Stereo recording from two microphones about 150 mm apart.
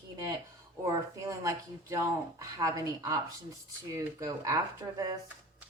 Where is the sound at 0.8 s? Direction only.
20° right (ahead or behind).